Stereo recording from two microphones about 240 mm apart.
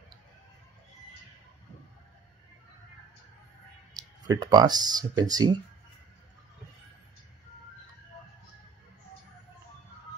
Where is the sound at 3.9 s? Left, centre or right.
Centre.